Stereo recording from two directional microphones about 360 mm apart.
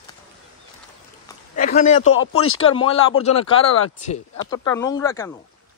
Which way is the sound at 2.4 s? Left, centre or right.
Left.